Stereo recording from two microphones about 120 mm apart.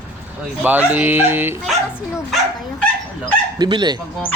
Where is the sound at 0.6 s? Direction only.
15° right (ahead or behind).